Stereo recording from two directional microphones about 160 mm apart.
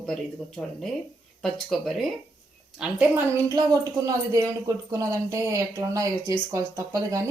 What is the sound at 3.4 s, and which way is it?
Speech, 20° right (ahead or behind).